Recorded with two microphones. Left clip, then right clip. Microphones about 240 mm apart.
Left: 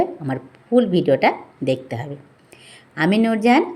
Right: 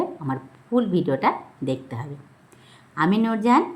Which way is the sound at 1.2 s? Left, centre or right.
Right.